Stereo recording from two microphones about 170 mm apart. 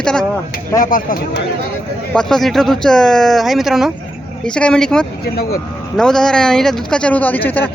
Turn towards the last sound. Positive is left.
turn(degrees=10)  # may be behind; listen again after turning